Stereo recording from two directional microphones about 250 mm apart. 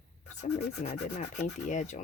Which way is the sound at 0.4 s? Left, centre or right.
Left.